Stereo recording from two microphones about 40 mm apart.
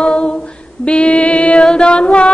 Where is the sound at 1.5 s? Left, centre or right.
Left.